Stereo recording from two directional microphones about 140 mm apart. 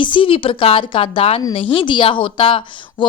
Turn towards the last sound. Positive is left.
turn(degrees=40)  # may be behind; listen again after turning